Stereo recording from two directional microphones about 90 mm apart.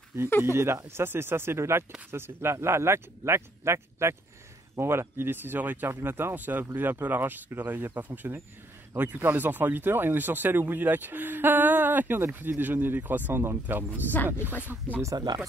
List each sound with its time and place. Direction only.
0.4 s speech: 30° right (ahead or behind)
14.1 s speech: 20° left (ahead or behind)
15.1 s speech: 50° right (ahead or behind)